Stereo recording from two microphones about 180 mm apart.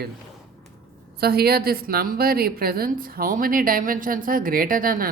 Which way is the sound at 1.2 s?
60° right (ahead or behind).